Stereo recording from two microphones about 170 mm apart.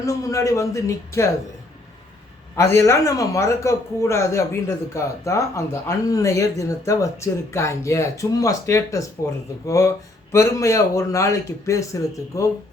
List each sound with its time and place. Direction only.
0.0 s speech: 20° left (ahead or behind)
2.6 s speech: 15° left (ahead or behind)